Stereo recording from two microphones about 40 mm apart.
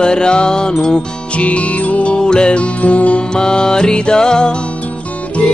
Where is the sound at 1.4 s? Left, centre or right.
Left.